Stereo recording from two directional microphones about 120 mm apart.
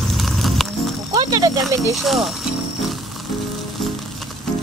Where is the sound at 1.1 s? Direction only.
35° right (ahead or behind).